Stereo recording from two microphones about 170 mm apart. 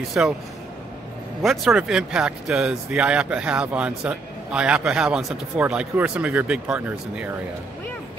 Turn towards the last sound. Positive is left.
turn(degrees=-10)  # may be behind; listen again after turning